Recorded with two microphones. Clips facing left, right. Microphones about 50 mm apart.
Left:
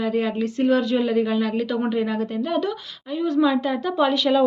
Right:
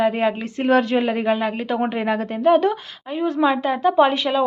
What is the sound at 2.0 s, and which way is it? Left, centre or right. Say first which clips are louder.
A woman's voice: right 1 dB; right.